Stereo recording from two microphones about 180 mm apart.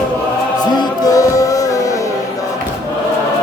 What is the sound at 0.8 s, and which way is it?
Music, 20° left (ahead or behind).